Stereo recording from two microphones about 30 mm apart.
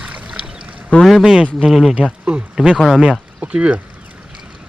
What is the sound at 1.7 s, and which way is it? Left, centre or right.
Speech, centre.